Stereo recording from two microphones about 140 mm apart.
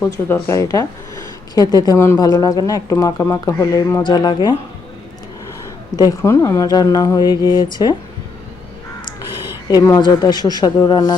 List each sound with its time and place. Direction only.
0.0 s speech: 20° left (ahead or behind)
6.0 s speech: 20° left (ahead or behind)
9.6 s speech: 25° left (ahead or behind)